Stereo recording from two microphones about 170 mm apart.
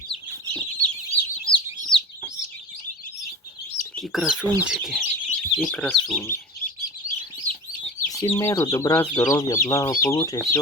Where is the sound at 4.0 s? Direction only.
Centre (ahead or behind).